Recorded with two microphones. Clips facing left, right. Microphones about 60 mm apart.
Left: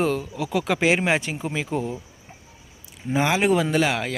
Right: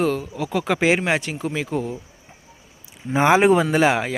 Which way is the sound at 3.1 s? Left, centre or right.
Right.